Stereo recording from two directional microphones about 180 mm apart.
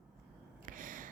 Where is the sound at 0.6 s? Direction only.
50° right (ahead or behind).